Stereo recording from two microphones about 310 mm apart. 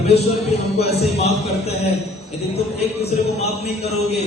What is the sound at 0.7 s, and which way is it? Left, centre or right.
Speech, centre.